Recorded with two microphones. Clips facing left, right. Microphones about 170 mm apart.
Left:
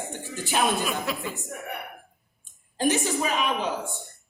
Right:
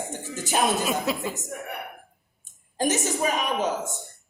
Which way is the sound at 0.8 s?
20° right (ahead or behind).